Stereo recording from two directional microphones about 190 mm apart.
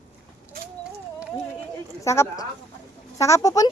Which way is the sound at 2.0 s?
15° left (ahead or behind).